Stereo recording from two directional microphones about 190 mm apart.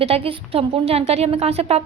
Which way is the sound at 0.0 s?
30° right (ahead or behind).